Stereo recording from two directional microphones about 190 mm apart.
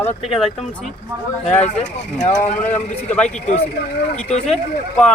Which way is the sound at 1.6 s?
35° left (ahead or behind).